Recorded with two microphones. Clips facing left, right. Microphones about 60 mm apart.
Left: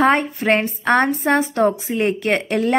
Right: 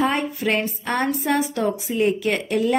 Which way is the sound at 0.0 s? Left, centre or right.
Left.